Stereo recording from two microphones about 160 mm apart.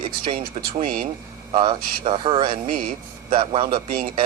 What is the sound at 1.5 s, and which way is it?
Speech, 35° right (ahead or behind).